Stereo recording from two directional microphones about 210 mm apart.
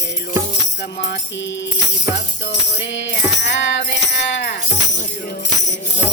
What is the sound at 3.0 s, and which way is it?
Music, 55° left (ahead or behind).